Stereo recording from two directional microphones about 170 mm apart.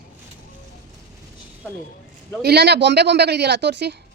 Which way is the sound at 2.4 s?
75° right (ahead or behind).